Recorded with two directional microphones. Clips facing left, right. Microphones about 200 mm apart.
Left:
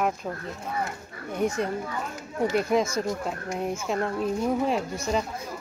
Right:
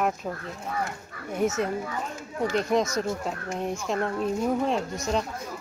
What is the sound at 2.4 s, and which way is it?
Speech, 10° left (ahead or behind).